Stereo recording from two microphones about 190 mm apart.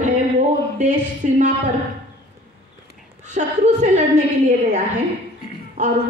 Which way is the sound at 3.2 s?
40° right (ahead or behind).